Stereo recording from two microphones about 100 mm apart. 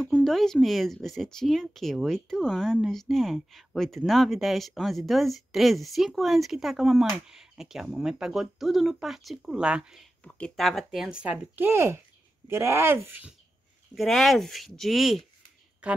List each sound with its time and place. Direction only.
0.0 s speech: 5° left (ahead or behind)
10.2 s speech: 10° left (ahead or behind); by 13.3 s 20° right (ahead or behind)
13.9 s speech: centre (ahead or behind)
15.8 s speech: 10° right (ahead or behind)